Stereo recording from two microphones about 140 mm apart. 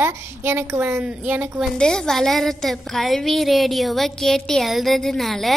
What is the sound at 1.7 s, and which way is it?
A woman's voice, 5° left (ahead or behind).